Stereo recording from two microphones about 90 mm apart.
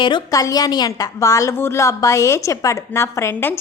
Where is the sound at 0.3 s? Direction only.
40° left (ahead or behind).